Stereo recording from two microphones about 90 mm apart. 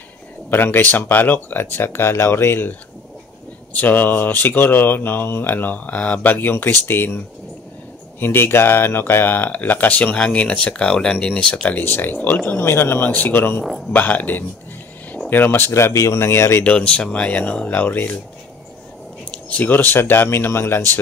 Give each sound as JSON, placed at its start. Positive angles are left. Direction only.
{"t": 0.5, "sound": "speech", "side_deg": 25}
{"t": 3.7, "sound": "speech", "side_deg": 20}
{"t": 8.2, "sound": "speech", "side_deg": 25}
{"t": 11.7, "sound": "speech", "side_deg": 25}
{"t": 16.6, "sound": "speech", "side_deg": 15}
{"t": 19.3, "sound": "speech", "side_deg": 15}